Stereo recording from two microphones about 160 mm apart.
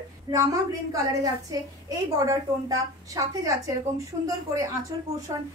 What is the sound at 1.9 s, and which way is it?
A woman's voice, 20° right (ahead or behind).